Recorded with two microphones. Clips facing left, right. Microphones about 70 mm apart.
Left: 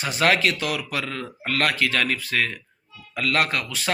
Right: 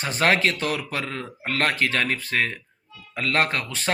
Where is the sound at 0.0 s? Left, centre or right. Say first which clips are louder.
Even; right.